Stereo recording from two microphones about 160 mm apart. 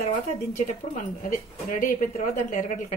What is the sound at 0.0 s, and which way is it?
A woman's voice, 45° left (ahead or behind).